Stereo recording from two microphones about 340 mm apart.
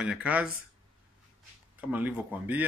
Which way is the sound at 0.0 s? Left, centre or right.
Centre.